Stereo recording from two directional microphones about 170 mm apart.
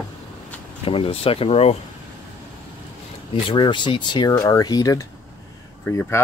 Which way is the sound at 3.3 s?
30° left (ahead or behind).